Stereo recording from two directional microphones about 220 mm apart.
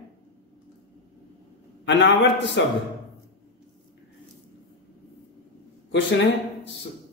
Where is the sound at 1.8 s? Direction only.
55° left (ahead or behind).